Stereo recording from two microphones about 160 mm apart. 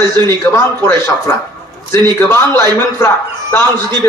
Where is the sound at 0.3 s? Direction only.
15° left (ahead or behind).